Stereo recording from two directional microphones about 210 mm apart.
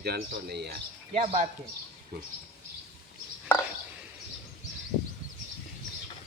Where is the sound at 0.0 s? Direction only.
50° right (ahead or behind).